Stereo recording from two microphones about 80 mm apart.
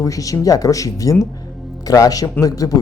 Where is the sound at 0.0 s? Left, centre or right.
Left.